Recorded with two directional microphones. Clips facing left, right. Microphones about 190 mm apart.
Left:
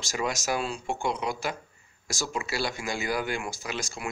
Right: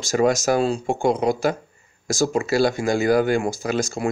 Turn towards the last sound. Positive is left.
turn(degrees=-45)  # may be behind; listen again after turning